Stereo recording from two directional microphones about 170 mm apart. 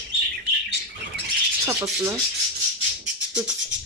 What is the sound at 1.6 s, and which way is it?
Speech, 15° right (ahead or behind).